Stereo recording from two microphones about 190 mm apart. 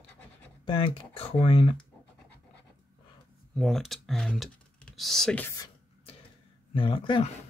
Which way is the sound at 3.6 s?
Centre (ahead or behind).